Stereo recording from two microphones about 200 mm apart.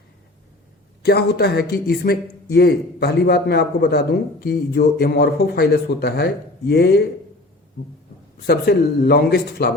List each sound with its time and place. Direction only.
1.0 s a man's voice: 55° left (ahead or behind)
8.4 s a man's voice: 50° left (ahead or behind)